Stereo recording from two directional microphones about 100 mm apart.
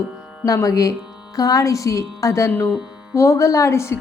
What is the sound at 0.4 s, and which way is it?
A woman's voice, 35° left (ahead or behind).